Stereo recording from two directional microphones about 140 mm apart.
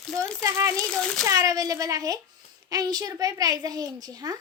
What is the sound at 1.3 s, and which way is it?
A child's voice, 25° right (ahead or behind).